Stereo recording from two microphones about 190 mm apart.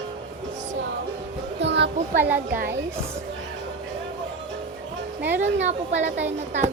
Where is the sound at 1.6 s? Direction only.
65° right (ahead or behind).